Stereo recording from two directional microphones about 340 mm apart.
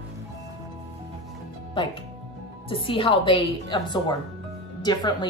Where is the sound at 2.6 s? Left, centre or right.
Centre.